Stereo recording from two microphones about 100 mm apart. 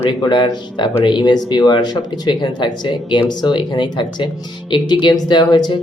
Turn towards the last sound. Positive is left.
turn(degrees=45)  # may be behind; listen again after turning